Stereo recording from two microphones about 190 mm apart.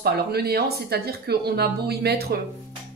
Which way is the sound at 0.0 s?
55° right (ahead or behind).